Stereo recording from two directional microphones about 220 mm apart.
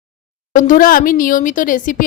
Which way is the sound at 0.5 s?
40° left (ahead or behind).